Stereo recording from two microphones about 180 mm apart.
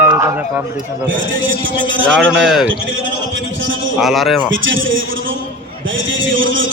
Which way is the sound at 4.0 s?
Centre (ahead or behind).